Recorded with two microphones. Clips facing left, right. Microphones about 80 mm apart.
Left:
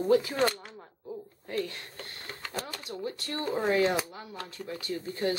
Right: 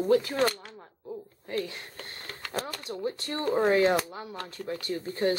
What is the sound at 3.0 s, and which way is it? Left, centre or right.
Speech, right.